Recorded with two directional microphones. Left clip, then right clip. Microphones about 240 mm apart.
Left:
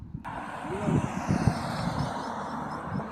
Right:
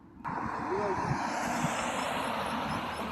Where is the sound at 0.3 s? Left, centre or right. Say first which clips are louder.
Right 2 dB; left.